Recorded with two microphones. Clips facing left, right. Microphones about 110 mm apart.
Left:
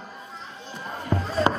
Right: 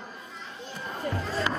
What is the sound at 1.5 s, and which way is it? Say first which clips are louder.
Music: left 9 dB; 35° left (ahead or behind).